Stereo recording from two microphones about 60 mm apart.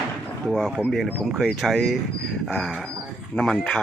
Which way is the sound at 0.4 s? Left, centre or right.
Centre.